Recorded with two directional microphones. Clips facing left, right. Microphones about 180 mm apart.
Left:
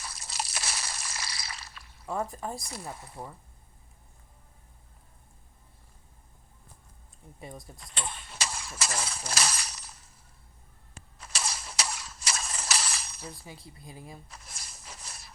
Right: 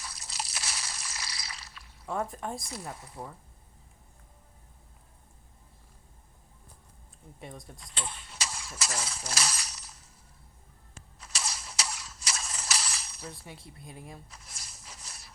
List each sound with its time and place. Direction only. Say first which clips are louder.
0.0 s a sound: left 3 dB; 50° left (ahead or behind)
2.0 s speech: even; centre (ahead or behind)
7.3 s speech: left 1 dB; centre (ahead or behind)
7.8 s speech: left 3 dB; 55° left (ahead or behind)
11.2 s mechanisms: left 2 dB; 55° left (ahead or behind)
13.2 s speech: right 3 dB; centre (ahead or behind)
14.3 s a sound: left 2 dB; 55° left (ahead or behind)